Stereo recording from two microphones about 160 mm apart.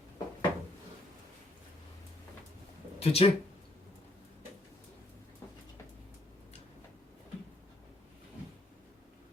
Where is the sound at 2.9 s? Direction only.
40° left (ahead or behind).